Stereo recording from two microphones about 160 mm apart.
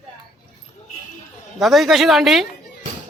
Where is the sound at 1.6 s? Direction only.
Centre (ahead or behind).